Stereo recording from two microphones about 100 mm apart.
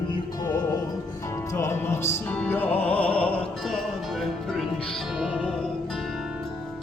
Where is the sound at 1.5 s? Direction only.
25° left (ahead or behind).